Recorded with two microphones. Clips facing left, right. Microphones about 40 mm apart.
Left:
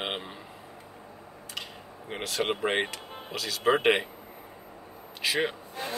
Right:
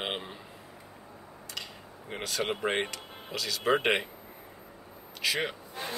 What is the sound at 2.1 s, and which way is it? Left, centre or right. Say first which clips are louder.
Speech: left 2 dB; centre.